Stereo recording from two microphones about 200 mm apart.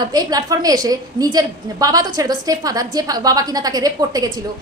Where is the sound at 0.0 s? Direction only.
20° right (ahead or behind).